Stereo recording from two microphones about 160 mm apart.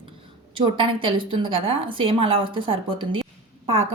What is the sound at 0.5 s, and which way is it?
A woman's voice, 30° right (ahead or behind).